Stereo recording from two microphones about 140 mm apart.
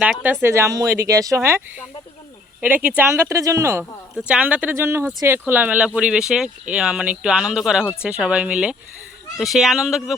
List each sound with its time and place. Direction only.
0.0 s speech: 10° right (ahead or behind)
0.4 s speech: 20° right (ahead or behind)
4.3 s speech: 10° right (ahead or behind)